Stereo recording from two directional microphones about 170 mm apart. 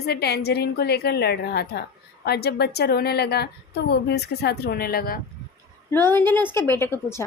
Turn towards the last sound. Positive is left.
turn(degrees=15)  # may be behind; listen again after turning